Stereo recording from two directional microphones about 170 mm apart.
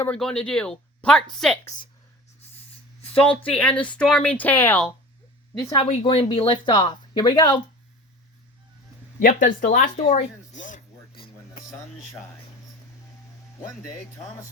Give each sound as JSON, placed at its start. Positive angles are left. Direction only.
{"t": 0.0, "sound": "speech", "side_deg": 5}
{"t": 3.2, "sound": "speech", "side_deg": 5}
{"t": 5.7, "sound": "speech", "side_deg": 35}
{"t": 9.1, "sound": "speech", "side_deg": 50}
{"t": 10.7, "sound": "a sound", "side_deg": 60}